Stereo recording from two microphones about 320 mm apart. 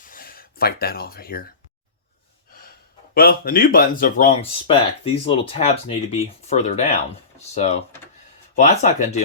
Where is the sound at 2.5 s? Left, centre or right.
Left.